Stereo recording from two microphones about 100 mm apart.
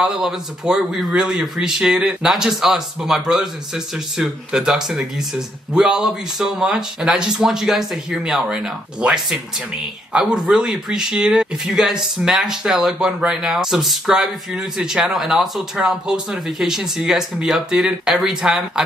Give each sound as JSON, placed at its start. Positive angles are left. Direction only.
{"t": 0.0, "sound": "speech", "side_deg": -5}